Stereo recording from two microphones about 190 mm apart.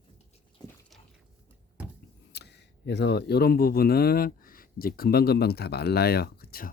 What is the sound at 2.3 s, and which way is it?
Speech, 60° left (ahead or behind).